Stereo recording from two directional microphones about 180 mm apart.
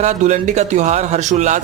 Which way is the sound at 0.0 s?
40° right (ahead or behind).